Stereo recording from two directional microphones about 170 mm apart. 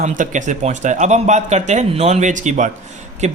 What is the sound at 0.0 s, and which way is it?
A man's voice, 45° right (ahead or behind).